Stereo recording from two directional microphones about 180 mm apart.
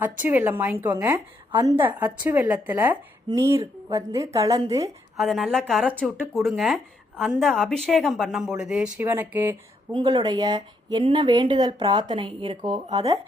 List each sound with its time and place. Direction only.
0.0 s a woman's voice: 10° right (ahead or behind)
5.1 s speech: centre (ahead or behind)
9.9 s speech: 25° right (ahead or behind)